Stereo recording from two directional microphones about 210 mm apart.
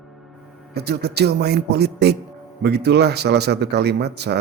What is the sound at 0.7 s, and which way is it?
A man's voice, 50° right (ahead or behind).